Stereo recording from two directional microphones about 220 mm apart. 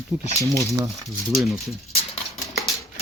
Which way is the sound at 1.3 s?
Centre (ahead or behind).